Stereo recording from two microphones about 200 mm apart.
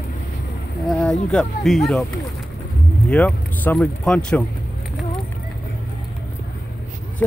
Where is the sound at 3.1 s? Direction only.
5° left (ahead or behind).